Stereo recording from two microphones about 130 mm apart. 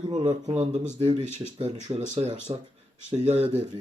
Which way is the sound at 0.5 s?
55° right (ahead or behind).